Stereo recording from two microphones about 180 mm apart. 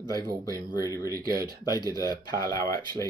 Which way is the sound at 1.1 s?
55° right (ahead or behind).